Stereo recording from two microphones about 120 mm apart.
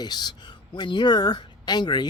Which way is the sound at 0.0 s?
35° left (ahead or behind).